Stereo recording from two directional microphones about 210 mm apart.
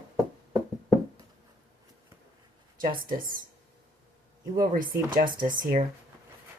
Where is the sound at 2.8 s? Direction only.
40° right (ahead or behind).